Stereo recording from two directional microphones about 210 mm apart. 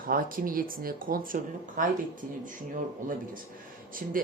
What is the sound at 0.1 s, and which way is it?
Speech, 40° right (ahead or behind).